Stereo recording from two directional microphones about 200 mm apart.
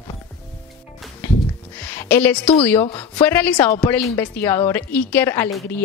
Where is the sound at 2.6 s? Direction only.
10° left (ahead or behind).